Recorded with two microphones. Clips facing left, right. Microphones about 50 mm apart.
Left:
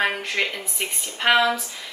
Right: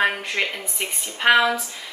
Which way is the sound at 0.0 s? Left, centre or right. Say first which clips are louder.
Right 1 dB; centre.